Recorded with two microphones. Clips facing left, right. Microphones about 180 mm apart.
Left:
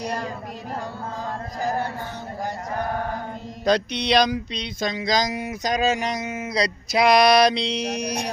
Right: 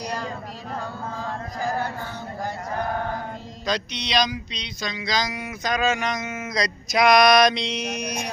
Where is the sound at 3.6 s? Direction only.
55° left (ahead or behind).